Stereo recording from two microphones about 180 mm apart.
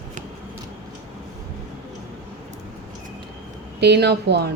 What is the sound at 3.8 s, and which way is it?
Speech, 65° right (ahead or behind).